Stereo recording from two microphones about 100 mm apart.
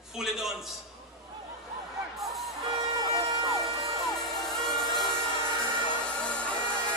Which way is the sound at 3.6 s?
Centre (ahead or behind).